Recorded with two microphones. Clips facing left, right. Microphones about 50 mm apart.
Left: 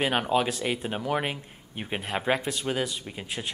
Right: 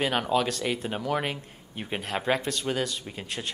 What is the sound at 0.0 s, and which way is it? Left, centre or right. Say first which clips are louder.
Speech: left 1 dB; centre.